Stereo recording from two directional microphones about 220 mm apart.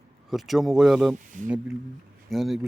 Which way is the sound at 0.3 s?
Centre (ahead or behind).